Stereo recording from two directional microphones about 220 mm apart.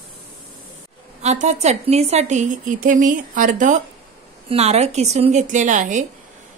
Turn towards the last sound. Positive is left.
turn(degrees=-35)  # may be behind; listen again after turning